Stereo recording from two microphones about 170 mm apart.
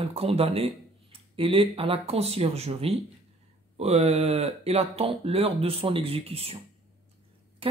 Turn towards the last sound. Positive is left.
turn(degrees=-30)  # may be behind; listen again after turning